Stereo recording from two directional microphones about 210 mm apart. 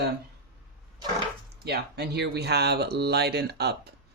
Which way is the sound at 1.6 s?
50° right (ahead or behind).